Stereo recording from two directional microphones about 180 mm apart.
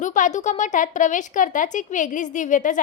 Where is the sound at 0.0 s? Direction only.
45° left (ahead or behind).